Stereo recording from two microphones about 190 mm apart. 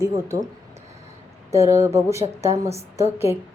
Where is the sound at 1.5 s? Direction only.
15° right (ahead or behind).